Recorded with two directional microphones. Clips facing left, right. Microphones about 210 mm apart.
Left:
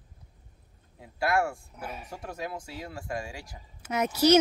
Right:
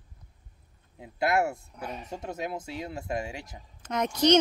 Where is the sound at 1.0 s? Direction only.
20° right (ahead or behind).